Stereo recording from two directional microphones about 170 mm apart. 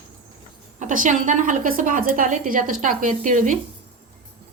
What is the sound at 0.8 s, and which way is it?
Speech, 45° right (ahead or behind).